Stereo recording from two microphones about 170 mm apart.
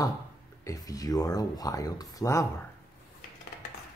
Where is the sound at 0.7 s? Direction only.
20° left (ahead or behind).